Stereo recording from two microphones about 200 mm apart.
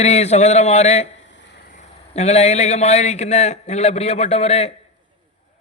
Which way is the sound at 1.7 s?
35° left (ahead or behind).